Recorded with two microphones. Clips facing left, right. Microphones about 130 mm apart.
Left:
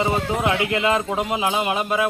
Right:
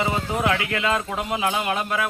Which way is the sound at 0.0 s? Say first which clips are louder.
Left 2 dB; 25° left (ahead or behind).